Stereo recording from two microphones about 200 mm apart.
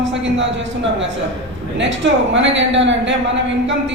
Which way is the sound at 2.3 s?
65° right (ahead or behind).